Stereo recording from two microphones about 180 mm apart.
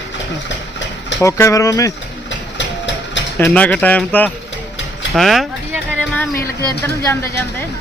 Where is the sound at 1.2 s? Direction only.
15° left (ahead or behind).